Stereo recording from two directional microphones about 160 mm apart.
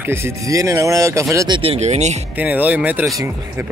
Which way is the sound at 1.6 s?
40° right (ahead or behind).